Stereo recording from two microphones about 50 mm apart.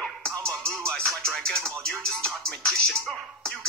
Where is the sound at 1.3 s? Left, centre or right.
Centre.